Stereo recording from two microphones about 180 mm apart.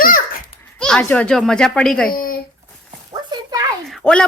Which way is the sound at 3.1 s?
20° right (ahead or behind).